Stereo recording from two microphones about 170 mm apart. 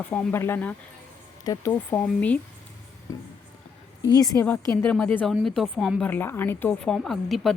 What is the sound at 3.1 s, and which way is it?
A woman's voice, 20° left (ahead or behind).